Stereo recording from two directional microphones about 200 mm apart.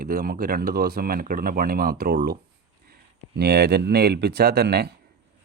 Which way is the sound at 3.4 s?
55° right (ahead or behind).